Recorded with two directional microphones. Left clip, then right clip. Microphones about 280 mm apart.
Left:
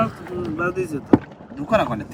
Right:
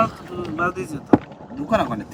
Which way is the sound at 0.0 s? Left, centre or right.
Centre.